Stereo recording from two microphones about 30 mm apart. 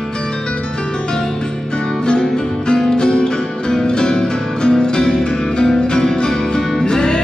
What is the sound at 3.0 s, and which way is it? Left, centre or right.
Music, left.